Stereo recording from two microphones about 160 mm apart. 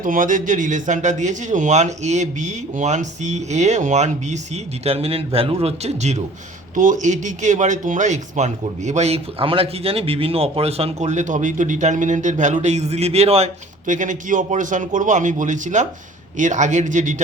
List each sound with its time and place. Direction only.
0.0 s speech: 55° right (ahead or behind)